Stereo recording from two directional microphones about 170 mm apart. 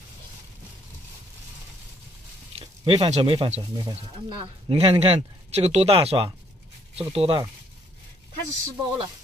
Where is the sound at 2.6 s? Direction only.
35° right (ahead or behind).